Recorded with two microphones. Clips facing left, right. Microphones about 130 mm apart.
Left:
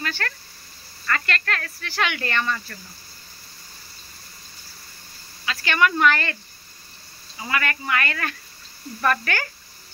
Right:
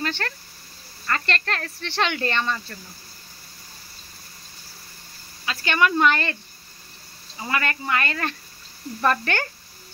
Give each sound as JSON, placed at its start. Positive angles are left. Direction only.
{"t": 0.0, "sound": "a sound", "side_deg": -25}
{"t": 1.0, "sound": "speech", "side_deg": -30}
{"t": 5.4, "sound": "speech", "side_deg": -20}
{"t": 7.4, "sound": "speech", "side_deg": -25}